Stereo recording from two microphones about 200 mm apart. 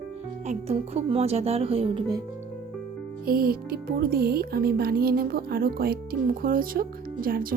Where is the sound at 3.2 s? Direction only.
45° right (ahead or behind).